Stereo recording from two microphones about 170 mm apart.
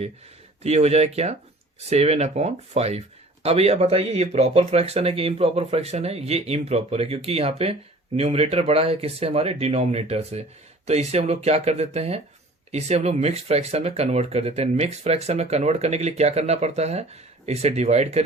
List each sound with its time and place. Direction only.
0.6 s speech: 40° right (ahead or behind)